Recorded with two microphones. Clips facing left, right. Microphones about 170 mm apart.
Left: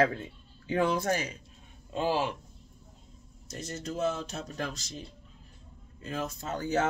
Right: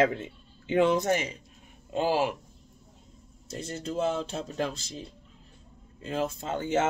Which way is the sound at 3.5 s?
30° right (ahead or behind).